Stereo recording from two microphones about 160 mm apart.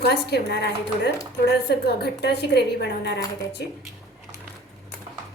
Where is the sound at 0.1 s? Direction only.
90° left.